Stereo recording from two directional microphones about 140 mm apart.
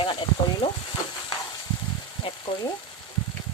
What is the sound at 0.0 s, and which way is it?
Sizzle, 40° left (ahead or behind).